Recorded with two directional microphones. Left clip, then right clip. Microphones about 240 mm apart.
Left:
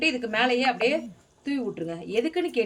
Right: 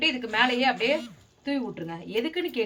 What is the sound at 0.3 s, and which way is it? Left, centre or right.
A woman's voice, centre.